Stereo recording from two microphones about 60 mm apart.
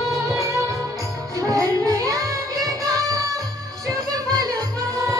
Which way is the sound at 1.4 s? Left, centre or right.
Right.